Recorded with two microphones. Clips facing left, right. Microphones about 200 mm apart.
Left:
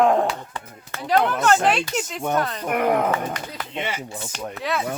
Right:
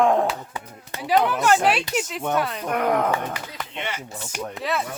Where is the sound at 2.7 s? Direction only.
10° left (ahead or behind).